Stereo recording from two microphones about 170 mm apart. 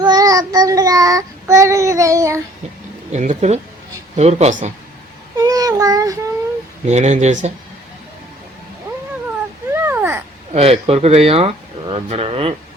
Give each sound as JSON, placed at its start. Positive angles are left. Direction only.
{"t": 0.0, "sound": "child singing", "side_deg": -20}
{"t": 3.1, "sound": "speech", "side_deg": -45}
{"t": 5.4, "sound": "child singing", "side_deg": -20}
{"t": 6.8, "sound": "speech", "side_deg": -40}
{"t": 9.7, "sound": "a sound", "side_deg": -10}
{"t": 10.5, "sound": "speech", "side_deg": -35}